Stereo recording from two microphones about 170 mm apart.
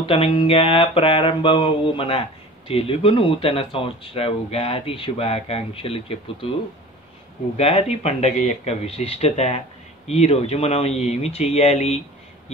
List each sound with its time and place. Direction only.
0.0 s speech: 30° left (ahead or behind)
7.5 s speech: 35° left (ahead or behind)